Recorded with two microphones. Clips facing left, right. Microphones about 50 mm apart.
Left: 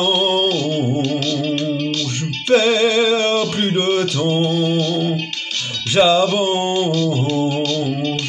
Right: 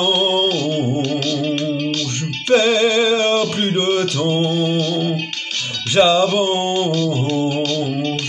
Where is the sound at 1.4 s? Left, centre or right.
Centre.